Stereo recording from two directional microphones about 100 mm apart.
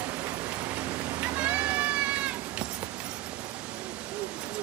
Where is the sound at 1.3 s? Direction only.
10° right (ahead or behind).